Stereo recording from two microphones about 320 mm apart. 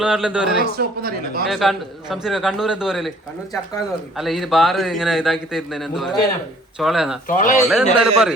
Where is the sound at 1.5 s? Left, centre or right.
Centre.